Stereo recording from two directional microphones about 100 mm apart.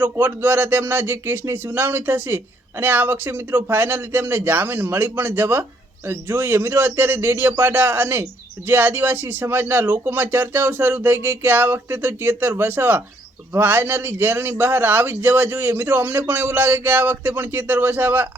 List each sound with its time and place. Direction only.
0.0 s a man's voice: 20° right (ahead or behind)